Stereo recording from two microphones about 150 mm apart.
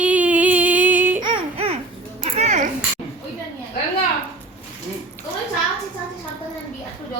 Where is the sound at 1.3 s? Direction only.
35° right (ahead or behind).